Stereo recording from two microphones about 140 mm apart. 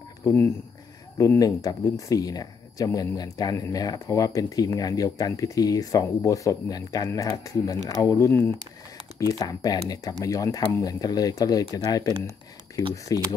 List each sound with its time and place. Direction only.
0.2 s speech: 15° left (ahead or behind)